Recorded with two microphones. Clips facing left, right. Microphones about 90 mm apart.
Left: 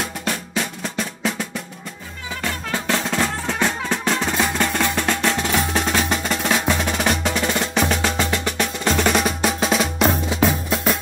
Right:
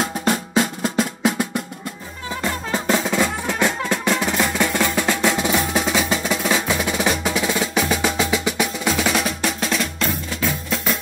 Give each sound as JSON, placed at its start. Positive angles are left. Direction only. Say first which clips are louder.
{"t": 0.0, "sound": "drum", "louder": "right 5 dB", "side_deg": -30}
{"t": 0.8, "sound": "drum", "louder": "right 5 dB", "side_deg": -10}
{"t": 2.9, "sound": "music", "louder": "right 2 dB", "side_deg": -10}